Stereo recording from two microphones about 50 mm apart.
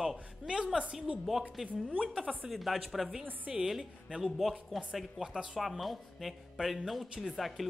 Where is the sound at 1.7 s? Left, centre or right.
Right.